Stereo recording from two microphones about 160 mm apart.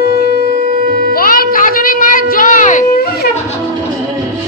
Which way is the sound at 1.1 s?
60° left (ahead or behind).